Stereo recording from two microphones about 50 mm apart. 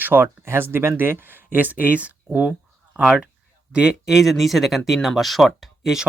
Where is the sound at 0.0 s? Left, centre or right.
Right.